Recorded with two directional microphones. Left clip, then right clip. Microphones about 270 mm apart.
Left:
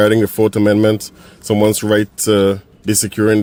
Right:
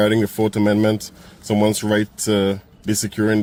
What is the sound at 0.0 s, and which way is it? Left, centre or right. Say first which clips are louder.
Speech: left 5 dB; left.